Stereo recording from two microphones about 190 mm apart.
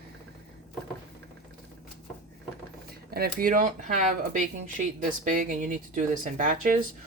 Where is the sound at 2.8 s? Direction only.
55° right (ahead or behind).